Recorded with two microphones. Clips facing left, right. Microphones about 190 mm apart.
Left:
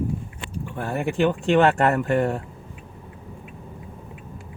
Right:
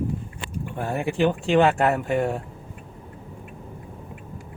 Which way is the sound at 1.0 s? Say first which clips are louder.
Left 2 dB; centre (ahead or behind).